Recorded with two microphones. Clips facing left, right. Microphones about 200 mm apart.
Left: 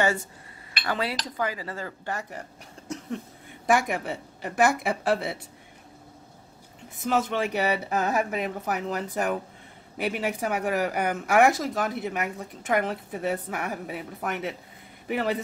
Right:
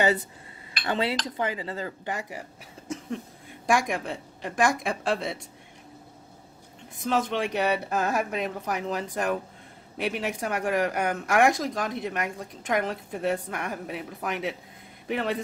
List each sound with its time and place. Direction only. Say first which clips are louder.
0.8 s speech: right 2 dB; 25° right (ahead or behind)
2.9 s a sound: right 1 dB; centre (ahead or behind)
3.6 s speech: left 1 dB; 5° left (ahead or behind)
7.1 s speech: left 1 dB; 5° left (ahead or behind)